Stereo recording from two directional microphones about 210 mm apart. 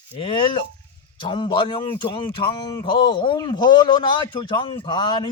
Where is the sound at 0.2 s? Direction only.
25° left (ahead or behind).